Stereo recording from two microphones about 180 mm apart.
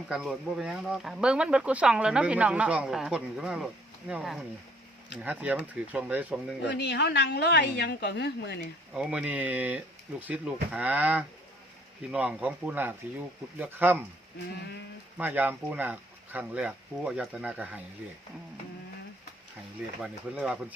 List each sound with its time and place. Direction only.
0.1 s speech: centre (ahead or behind)
6.6 s a woman's voice: 70° left (ahead or behind)
9.0 s speech: 5° right (ahead or behind)
15.2 s speech: 10° right (ahead or behind)
20.0 s speech: 5° right (ahead or behind)